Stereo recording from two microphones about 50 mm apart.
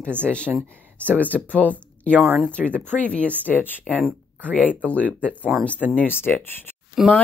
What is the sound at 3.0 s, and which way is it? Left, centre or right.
Speech, left.